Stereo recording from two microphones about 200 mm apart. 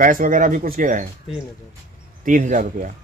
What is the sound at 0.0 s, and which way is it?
Speech, 40° right (ahead or behind).